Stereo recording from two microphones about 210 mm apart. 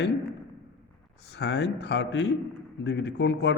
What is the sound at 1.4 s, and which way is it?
A man's voice, 55° left (ahead or behind).